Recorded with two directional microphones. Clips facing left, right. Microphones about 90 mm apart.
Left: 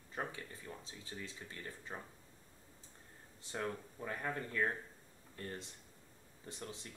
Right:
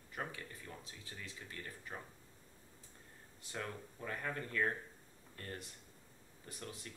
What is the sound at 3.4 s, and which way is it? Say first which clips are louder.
Speech: left 4 dB; 30° left (ahead or behind).